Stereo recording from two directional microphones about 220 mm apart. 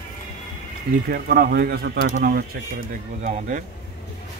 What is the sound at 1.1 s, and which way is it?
Speech, 40° right (ahead or behind).